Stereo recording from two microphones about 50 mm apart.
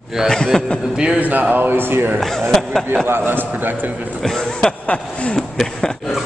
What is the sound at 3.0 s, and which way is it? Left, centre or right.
Speech, right.